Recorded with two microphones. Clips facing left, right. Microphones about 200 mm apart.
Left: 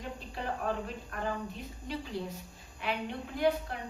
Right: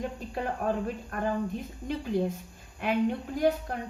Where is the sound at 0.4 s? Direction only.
50° right (ahead or behind).